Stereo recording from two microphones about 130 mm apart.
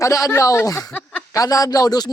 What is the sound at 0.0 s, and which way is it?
A man's voice, 25° left (ahead or behind).